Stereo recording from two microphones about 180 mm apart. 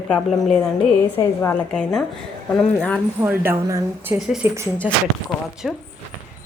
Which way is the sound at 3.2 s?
10° right (ahead or behind).